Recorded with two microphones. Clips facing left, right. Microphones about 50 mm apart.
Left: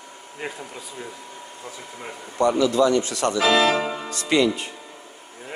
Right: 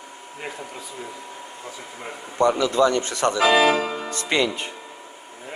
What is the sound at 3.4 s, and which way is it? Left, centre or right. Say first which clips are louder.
Speech: right 1 dB; centre.